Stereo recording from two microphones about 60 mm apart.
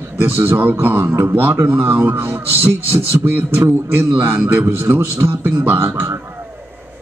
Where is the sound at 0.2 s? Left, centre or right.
Right.